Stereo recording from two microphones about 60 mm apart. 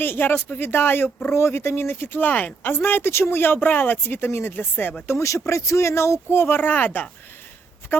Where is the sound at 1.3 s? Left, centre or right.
Left.